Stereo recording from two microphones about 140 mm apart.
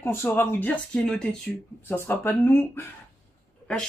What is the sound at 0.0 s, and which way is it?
Speech, 15° left (ahead or behind).